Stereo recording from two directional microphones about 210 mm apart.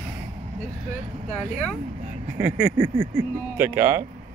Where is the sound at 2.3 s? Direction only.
10° right (ahead or behind).